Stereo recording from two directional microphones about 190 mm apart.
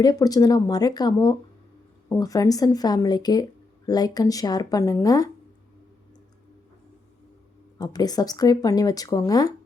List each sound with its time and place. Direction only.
0.0 s speech: 20° left (ahead or behind)
7.8 s speech: 20° left (ahead or behind)